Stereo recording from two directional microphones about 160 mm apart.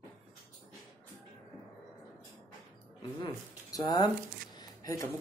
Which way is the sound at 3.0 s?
25° left (ahead or behind).